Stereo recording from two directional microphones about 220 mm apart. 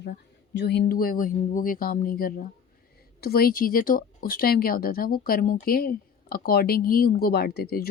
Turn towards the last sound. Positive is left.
turn(degrees=45)  # may be behind; listen again after turning